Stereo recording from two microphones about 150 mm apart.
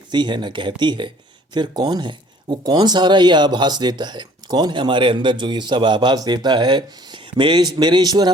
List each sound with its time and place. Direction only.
0.1 s speech: 30° right (ahead or behind)